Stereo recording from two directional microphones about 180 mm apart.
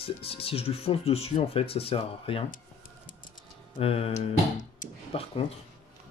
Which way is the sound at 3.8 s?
30° left (ahead or behind).